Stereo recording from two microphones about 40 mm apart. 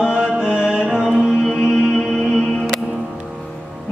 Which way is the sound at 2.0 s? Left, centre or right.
Centre.